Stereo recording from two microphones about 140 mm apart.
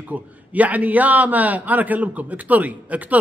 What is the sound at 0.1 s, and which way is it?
A man's voice, 10° right (ahead or behind).